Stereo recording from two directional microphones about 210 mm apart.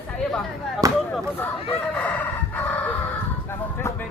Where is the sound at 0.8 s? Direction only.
15° right (ahead or behind).